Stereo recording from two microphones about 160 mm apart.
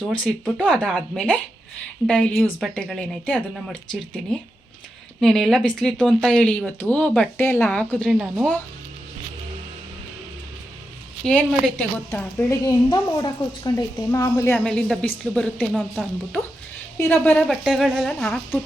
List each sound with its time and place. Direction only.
0.0 s a woman's voice: 10° left (ahead or behind)
5.2 s speech: centre (ahead or behind)
11.3 s a woman's voice: 5° left (ahead or behind)
14.6 s speech: 5° left (ahead or behind)
17.0 s speech: 10° left (ahead or behind)